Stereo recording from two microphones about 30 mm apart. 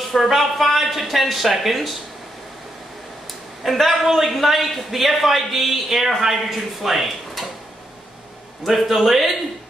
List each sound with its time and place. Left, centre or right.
0.1 s a woman's voice: centre
3.6 s a man's voice: centre
8.6 s a man's voice: centre